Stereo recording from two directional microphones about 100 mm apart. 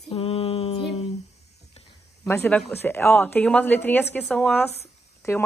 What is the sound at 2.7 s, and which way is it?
A woman's voice, 20° left (ahead or behind).